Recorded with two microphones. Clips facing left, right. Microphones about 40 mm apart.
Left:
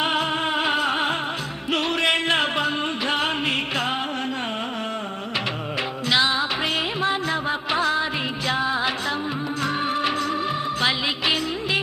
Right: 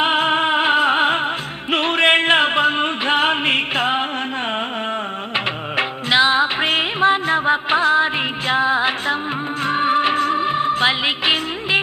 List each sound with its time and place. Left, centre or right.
0.0 s music: right
5.7 s music: right